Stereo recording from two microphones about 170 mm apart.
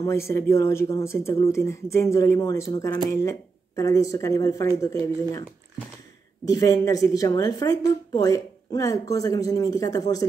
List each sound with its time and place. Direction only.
0.0 s a woman's voice: 15° left (ahead or behind)
6.4 s a woman's voice: 20° left (ahead or behind)